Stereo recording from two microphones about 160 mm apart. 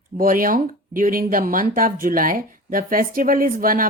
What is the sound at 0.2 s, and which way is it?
Speech, 60° right (ahead or behind).